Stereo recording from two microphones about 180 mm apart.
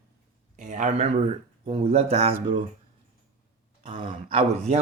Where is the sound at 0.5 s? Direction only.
45° right (ahead or behind).